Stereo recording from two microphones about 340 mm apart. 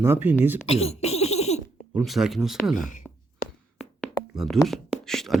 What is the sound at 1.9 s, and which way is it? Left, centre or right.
Speech, centre.